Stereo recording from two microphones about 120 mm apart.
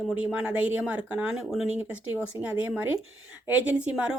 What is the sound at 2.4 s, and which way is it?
Speech, 15° right (ahead or behind).